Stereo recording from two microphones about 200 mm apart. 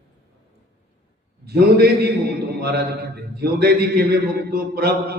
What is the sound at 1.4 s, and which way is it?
Speech, 55° right (ahead or behind).